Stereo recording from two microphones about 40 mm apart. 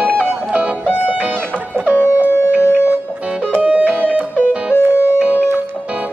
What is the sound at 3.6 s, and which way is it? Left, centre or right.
Music, right.